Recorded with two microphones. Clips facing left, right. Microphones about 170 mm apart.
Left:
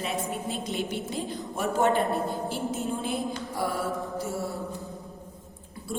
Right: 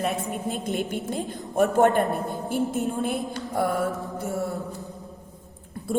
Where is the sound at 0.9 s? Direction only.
50° right (ahead or behind).